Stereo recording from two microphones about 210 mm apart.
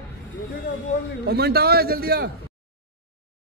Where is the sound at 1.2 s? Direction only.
50° right (ahead or behind).